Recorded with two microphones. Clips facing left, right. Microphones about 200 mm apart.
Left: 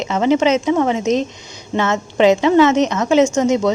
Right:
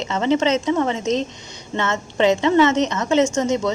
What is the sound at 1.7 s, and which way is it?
Speech, 90° left.